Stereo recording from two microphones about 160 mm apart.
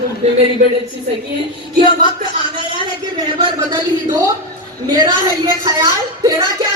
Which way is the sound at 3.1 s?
25° right (ahead or behind).